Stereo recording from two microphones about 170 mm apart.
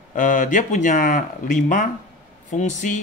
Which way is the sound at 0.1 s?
50° left (ahead or behind).